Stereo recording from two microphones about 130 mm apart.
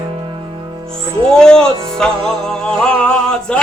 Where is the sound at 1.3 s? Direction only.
5° left (ahead or behind).